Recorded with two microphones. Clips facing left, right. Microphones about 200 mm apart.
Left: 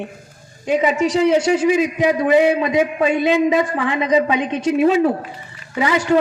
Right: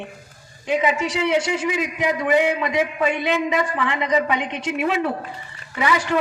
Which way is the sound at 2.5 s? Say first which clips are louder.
Left 5 dB; 25° left (ahead or behind).